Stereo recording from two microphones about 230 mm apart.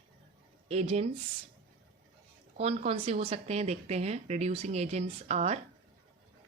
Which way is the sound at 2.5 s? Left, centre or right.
Right.